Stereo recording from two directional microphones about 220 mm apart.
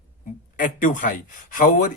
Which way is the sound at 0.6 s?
35° left (ahead or behind).